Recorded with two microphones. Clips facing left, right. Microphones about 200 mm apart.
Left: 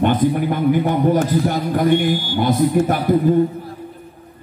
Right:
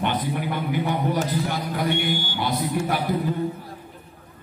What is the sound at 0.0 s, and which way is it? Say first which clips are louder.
A man's voice: left 9 dB; 45° left (ahead or behind).